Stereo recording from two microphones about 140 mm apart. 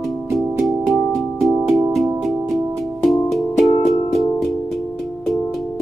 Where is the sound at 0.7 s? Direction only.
Centre (ahead or behind).